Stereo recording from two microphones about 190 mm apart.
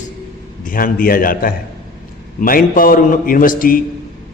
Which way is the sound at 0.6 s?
45° left (ahead or behind).